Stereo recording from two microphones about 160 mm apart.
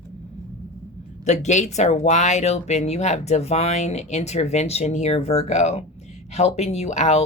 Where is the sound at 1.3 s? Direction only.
45° left (ahead or behind).